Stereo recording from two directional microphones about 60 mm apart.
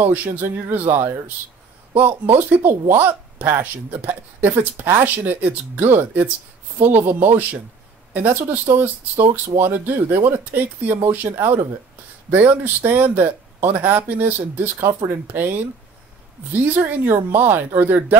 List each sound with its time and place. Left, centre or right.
0.0 s speech: right
16.5 s speech: right